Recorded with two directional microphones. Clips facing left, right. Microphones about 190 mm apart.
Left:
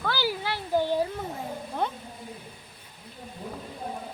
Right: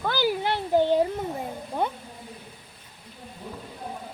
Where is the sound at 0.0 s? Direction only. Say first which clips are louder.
Right 4 dB; 20° right (ahead or behind).